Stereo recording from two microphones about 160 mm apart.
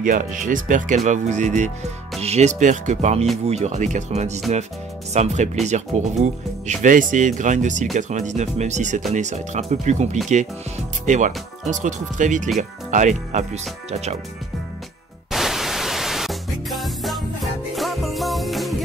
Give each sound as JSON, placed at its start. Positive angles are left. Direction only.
{"t": 0.0, "sound": "speech", "side_deg": -55}
{"t": 15.3, "sound": "music", "side_deg": 0}